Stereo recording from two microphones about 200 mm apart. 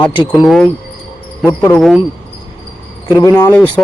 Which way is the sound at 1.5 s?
10° left (ahead or behind).